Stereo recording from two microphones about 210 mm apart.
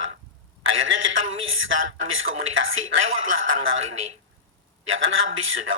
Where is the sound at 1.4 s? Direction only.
70° right (ahead or behind).